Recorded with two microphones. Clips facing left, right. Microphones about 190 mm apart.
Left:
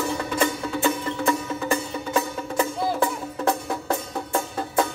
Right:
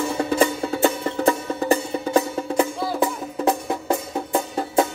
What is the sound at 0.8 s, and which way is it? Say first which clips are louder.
Music: right 4 dB; 35° right (ahead or behind).